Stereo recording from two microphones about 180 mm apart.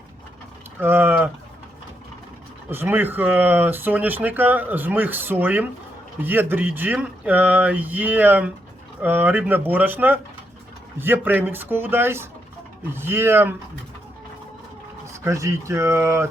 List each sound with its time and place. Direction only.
0.8 s speech: 10° right (ahead or behind)
2.6 s speech: 10° right (ahead or behind)
15.2 s speech: 15° right (ahead or behind)